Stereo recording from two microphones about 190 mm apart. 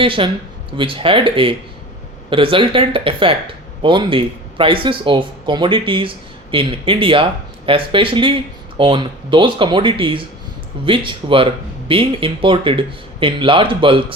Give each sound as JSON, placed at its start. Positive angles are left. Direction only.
{"t": 0.0, "sound": "speech", "side_deg": -25}